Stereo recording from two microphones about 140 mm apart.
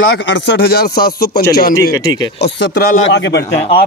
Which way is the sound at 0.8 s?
90° left.